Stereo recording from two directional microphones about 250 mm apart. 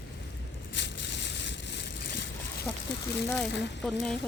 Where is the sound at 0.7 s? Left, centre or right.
Left.